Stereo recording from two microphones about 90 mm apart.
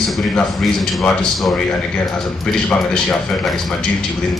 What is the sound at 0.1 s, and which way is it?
A man's voice, centre (ahead or behind).